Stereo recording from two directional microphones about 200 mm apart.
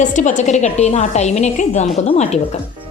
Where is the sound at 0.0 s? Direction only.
40° left (ahead or behind).